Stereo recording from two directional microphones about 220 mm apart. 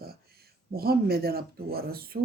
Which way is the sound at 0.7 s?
45° right (ahead or behind).